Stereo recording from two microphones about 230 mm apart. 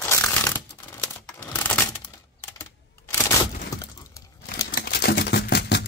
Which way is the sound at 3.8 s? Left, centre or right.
Centre.